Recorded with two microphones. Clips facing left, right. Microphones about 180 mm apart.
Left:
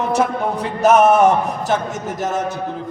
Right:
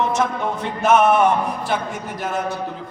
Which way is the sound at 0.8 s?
40° left (ahead or behind).